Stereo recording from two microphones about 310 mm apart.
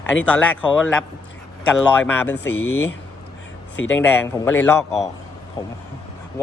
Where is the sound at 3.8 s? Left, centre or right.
Left.